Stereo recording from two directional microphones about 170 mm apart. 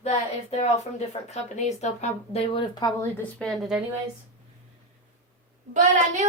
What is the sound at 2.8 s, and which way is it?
Speech, 20° left (ahead or behind).